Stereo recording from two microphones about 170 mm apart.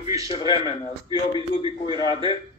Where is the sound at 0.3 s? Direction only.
30° left (ahead or behind).